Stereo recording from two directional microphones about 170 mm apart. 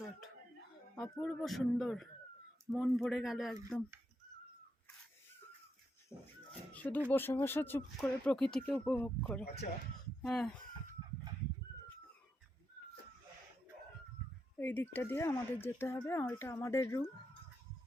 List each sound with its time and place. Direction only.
1.2 s a man's voice: centre (ahead or behind)
6.1 s speech: 15° left (ahead or behind)
6.7 s a sound: 10° left (ahead or behind)
7.1 s a man's voice: 10° left (ahead or behind)
14.6 s speech: 10° left (ahead or behind)